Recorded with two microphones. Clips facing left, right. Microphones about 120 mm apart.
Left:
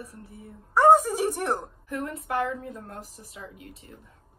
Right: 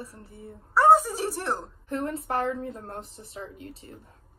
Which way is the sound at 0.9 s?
10° left (ahead or behind).